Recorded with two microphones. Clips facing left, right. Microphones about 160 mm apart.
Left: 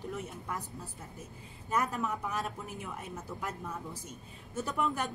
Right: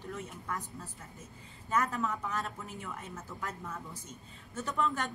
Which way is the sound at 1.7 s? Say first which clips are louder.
Even; 10° left (ahead or behind).